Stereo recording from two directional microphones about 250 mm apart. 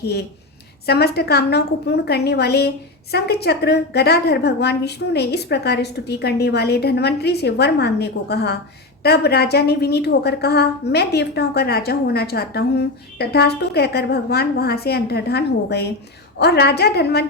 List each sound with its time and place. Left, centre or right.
0.0 s a woman's voice: left